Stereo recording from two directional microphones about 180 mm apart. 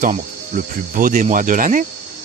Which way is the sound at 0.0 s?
50° right (ahead or behind).